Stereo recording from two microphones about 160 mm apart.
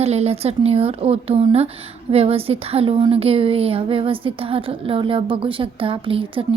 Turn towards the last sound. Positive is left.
turn(degrees=-35)  # may be behind; listen again after turning